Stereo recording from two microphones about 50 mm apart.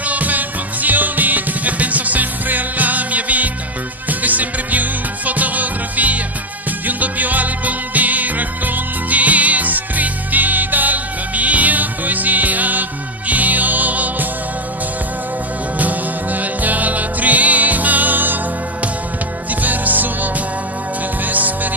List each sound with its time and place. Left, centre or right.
0.0 s music: right
15.8 s music: right
19.6 s music: right